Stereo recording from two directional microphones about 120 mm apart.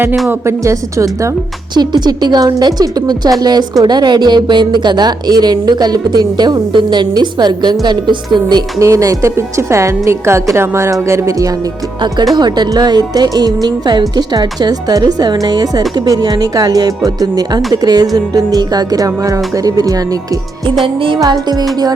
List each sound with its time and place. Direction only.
0.3 s a woman's voice: 25° right (ahead or behind)
1.7 s a woman's voice: 35° right (ahead or behind)
8.8 s a woman's voice: 25° right (ahead or behind)
20.8 s music: 45° right (ahead or behind)
21.2 s a woman's voice: 30° right (ahead or behind)